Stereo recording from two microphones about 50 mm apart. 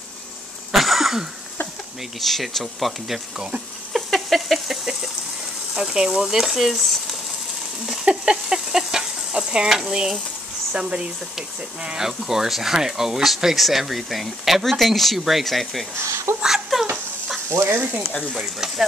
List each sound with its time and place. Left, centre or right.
0.7 s cough: centre
2.1 s speech: centre
3.9 s a sound: centre
5.8 s speech: centre
7.8 s speech: centre
17.5 s stir: right
18.3 s speech: centre